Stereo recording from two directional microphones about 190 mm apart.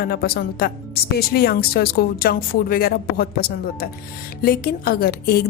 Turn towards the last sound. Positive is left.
turn(degrees=55)  # may be behind; listen again after turning